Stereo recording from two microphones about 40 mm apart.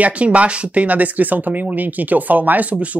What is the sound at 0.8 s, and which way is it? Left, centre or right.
Speech, right.